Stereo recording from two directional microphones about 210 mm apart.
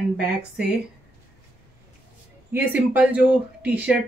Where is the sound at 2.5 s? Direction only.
10° right (ahead or behind).